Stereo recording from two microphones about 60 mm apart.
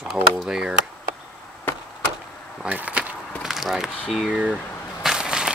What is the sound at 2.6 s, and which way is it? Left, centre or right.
Bee, right.